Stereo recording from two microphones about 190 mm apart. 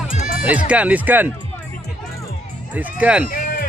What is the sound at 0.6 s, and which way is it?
Speech, 5° right (ahead or behind).